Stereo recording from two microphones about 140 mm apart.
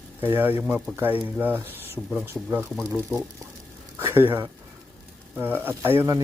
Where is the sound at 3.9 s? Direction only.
15° right (ahead or behind).